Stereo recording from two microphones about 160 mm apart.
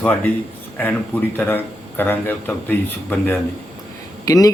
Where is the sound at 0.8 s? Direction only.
10° left (ahead or behind).